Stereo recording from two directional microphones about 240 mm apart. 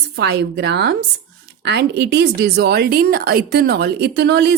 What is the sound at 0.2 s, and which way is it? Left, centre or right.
A woman's voice, right.